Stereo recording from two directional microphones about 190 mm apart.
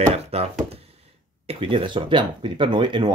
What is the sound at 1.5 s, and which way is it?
Speech, 25° right (ahead or behind).